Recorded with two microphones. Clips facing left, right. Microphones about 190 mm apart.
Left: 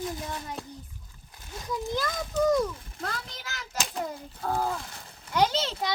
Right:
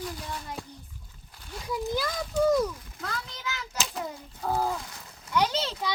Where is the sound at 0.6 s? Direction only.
Centre (ahead or behind).